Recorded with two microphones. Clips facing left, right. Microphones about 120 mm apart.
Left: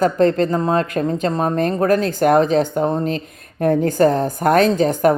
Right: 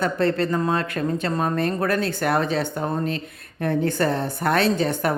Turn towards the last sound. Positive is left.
turn(degrees=40)  # may be behind; listen again after turning